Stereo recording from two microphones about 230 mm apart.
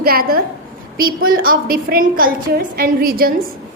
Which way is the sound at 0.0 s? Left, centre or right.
Right.